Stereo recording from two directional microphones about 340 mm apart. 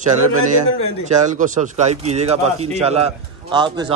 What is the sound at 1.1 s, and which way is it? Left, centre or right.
Speech, right.